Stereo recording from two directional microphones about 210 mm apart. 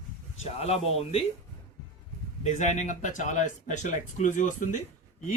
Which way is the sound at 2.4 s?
35° left (ahead or behind).